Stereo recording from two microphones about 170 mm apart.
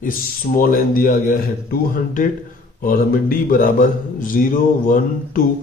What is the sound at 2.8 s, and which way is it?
A man's voice, 55° left (ahead or behind).